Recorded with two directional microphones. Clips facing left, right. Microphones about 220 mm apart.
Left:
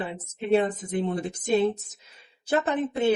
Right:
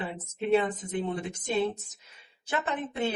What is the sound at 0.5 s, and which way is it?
Speech, 35° left (ahead or behind).